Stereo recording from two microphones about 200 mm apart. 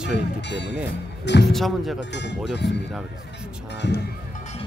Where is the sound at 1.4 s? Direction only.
Centre (ahead or behind).